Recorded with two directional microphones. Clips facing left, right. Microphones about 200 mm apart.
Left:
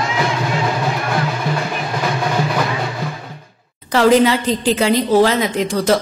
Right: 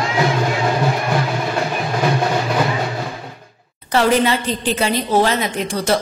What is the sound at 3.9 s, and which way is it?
A woman's voice, 90° left.